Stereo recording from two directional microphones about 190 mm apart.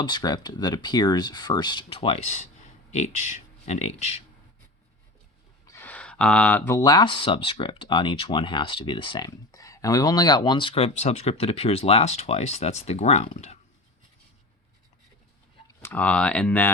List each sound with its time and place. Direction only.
0.0 s speech: 20° left (ahead or behind)
5.6 s speech: 10° left (ahead or behind); by 13.6 s 35° left (ahead or behind)
15.6 s speech: 10° left (ahead or behind)